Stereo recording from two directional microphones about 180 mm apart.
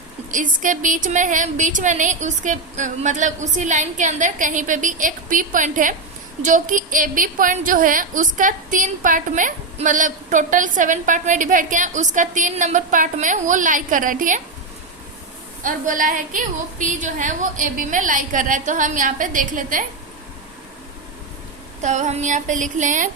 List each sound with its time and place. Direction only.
0.3 s a woman's voice: 45° right (ahead or behind)
15.6 s a woman's voice: 45° right (ahead or behind)
21.8 s a woman's voice: 40° right (ahead or behind)